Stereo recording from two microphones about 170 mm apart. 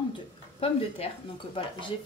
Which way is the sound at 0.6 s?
35° left (ahead or behind).